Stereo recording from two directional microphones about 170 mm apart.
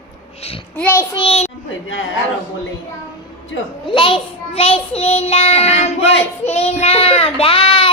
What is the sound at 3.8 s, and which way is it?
Child singing, 30° left (ahead or behind).